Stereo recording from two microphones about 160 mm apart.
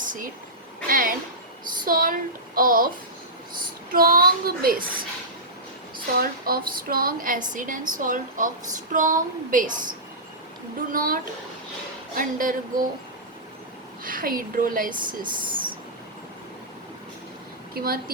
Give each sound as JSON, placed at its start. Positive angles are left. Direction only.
{"t": 0.0, "sound": "a sound", "side_deg": -55}
{"t": 1.8, "sound": "a woman's voice", "side_deg": -60}
{"t": 3.9, "sound": "a woman's voice", "side_deg": -65}
{"t": 6.1, "sound": "a woman's voice", "side_deg": -65}
{"t": 10.9, "sound": "a woman's voice", "side_deg": -65}
{"t": 14.0, "sound": "a woman's voice", "side_deg": -60}
{"t": 17.7, "sound": "a woman's voice", "side_deg": -65}